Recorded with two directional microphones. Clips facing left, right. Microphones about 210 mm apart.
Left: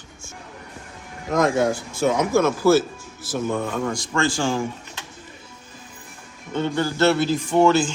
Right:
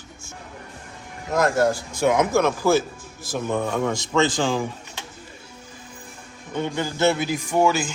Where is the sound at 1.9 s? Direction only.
15° right (ahead or behind).